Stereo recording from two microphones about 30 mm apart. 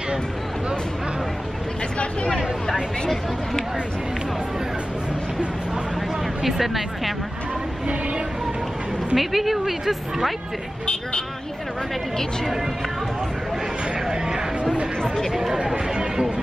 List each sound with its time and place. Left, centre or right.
6.4 s speech: centre
9.1 s a woman's voice: centre
16.0 s a sound: right